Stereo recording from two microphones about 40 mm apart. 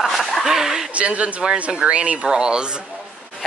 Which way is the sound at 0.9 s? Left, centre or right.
Right.